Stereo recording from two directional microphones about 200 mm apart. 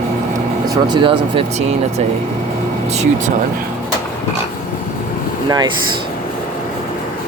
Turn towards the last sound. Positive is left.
turn(degrees=-20)  # may be behind; listen again after turning